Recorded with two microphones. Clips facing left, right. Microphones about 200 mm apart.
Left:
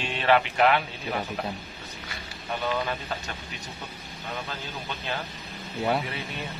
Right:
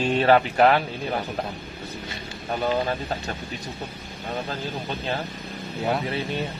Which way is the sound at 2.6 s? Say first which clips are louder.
Right 5 dB; 40° right (ahead or behind).